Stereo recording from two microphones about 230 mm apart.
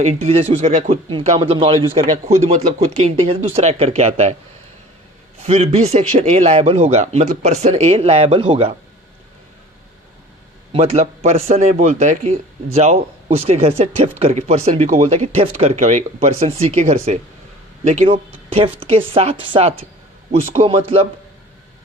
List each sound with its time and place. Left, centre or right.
0.0 s speech: right
5.4 s speech: right
10.7 s speech: right